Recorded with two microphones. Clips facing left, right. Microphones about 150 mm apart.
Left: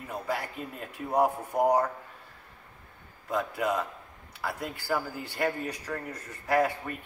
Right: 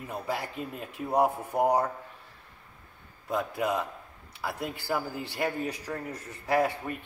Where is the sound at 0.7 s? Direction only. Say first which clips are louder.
Even; 10° right (ahead or behind).